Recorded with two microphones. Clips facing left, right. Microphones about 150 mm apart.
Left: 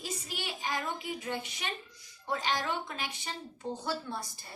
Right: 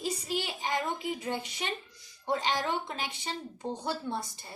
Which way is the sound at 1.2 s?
30° right (ahead or behind).